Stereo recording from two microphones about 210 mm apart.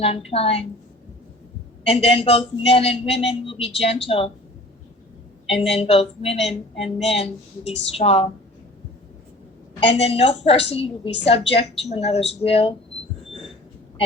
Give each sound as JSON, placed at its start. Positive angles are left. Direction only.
{"t": 0.3, "sound": "a woman's voice", "side_deg": 30}
{"t": 1.9, "sound": "a woman's voice", "side_deg": 30}
{"t": 5.5, "sound": "a woman's voice", "side_deg": 30}
{"t": 9.9, "sound": "a woman's voice", "side_deg": 30}